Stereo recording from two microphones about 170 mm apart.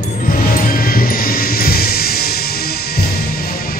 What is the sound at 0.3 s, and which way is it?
Music, 55° left (ahead or behind).